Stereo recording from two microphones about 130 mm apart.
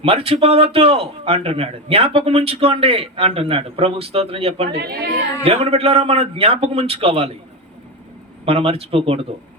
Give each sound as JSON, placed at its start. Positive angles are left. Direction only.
{"t": 0.0, "sound": "a man's voice", "side_deg": -50}
{"t": 8.4, "sound": "a man's voice", "side_deg": -45}